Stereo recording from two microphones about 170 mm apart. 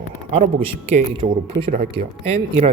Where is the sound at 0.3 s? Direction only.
35° right (ahead or behind).